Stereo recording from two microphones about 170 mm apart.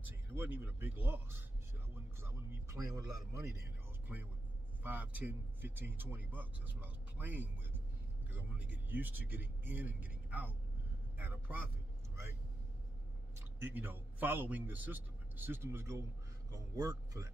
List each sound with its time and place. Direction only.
0.4 s speech: 10° right (ahead or behind)
2.2 s a sound: 15° right (ahead or behind)
3.0 s speech: 15° right (ahead or behind)
13.6 s speech: 10° right (ahead or behind)